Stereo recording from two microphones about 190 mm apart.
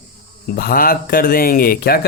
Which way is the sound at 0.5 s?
50° left (ahead or behind).